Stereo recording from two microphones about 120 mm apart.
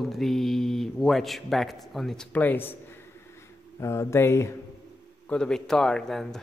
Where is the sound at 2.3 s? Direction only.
15° left (ahead or behind).